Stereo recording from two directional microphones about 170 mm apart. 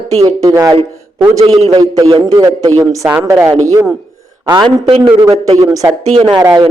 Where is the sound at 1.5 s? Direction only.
35° right (ahead or behind).